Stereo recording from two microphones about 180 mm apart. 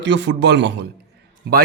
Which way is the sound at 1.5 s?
65° right (ahead or behind).